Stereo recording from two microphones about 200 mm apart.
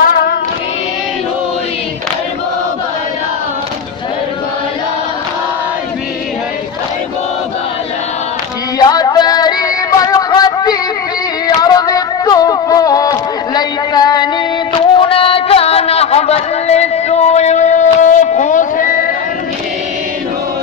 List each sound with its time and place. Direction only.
0.0 s music: 50° left (ahead or behind)
8.7 s music: 20° left (ahead or behind)
11.4 s a sound: 20° left (ahead or behind); by 18.9 s 40° left (ahead or behind)